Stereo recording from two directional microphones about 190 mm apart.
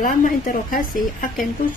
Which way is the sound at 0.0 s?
45° left (ahead or behind).